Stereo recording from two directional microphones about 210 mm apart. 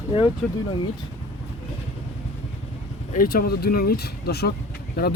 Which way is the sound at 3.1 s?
45° left (ahead or behind).